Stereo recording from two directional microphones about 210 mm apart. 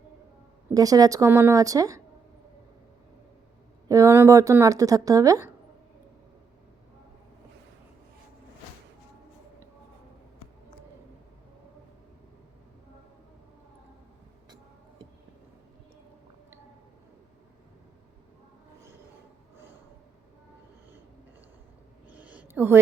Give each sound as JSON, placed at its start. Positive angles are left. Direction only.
{"t": 0.7, "sound": "speech", "side_deg": -15}
{"t": 3.8, "sound": "speech", "side_deg": -15}
{"t": 22.1, "sound": "a sound", "side_deg": -5}